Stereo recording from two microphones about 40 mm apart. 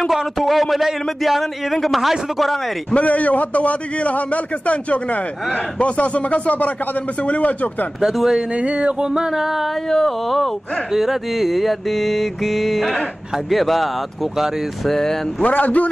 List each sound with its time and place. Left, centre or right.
0.1 s mantra: centre
2.9 s a man's voice: left
8.0 s mantra: centre
8.5 s a sound: right
9.3 s a sound: centre
9.8 s mantra: centre
14.9 s speech: centre
15.4 s a man's voice: left